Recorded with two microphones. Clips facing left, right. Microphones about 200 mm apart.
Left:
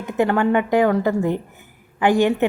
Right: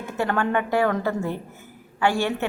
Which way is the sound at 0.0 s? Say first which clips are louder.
Left 6 dB; 15° left (ahead or behind).